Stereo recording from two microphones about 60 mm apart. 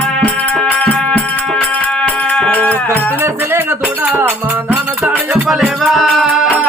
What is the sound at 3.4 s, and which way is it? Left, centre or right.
Music, right.